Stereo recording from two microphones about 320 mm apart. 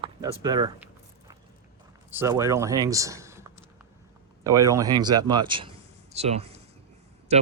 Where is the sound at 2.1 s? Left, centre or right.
Centre.